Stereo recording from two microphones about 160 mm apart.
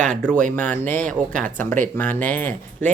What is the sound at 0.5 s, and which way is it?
Speech, 10° left (ahead or behind).